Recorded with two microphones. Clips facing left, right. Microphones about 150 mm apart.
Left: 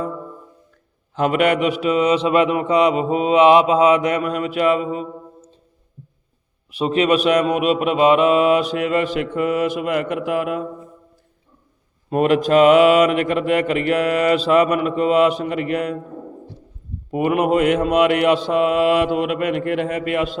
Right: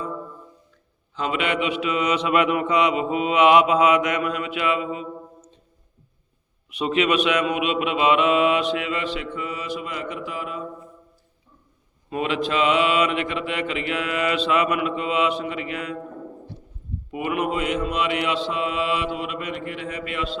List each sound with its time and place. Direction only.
1.1 s speech: 50° left (ahead or behind)
6.7 s mantra: 35° left (ahead or behind); by 10.7 s 65° left (ahead or behind)
12.1 s mantra: 50° left (ahead or behind)
17.1 s mantra: 45° left (ahead or behind)